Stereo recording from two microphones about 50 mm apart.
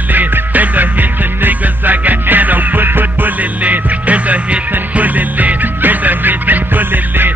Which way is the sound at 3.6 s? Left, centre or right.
Right.